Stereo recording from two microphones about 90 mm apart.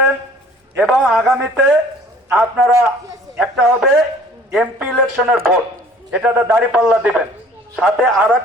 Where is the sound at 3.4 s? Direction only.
Centre (ahead or behind).